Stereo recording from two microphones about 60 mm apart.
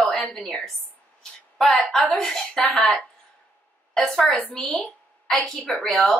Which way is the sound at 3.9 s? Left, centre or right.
Centre.